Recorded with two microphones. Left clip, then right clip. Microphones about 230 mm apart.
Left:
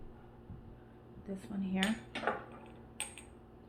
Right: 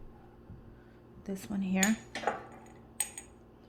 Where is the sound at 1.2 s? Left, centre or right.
Right.